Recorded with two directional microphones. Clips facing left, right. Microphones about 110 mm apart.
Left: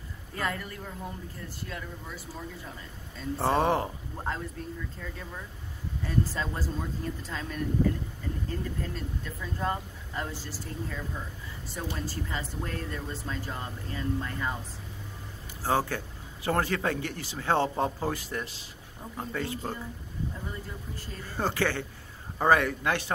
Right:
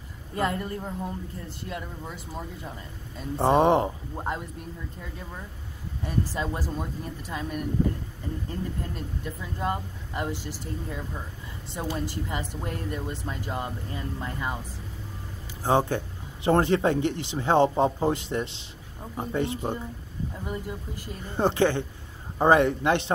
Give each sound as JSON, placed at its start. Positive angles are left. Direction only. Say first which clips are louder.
{"t": 0.4, "sound": "speech", "louder": "right 6 dB", "side_deg": -25}
{"t": 6.0, "sound": "speech", "louder": "right 1 dB", "side_deg": -15}
{"t": 12.1, "sound": "speech", "louder": "right 3 dB", "side_deg": -20}
{"t": 15.6, "sound": "speech", "louder": "right 4 dB", "side_deg": -20}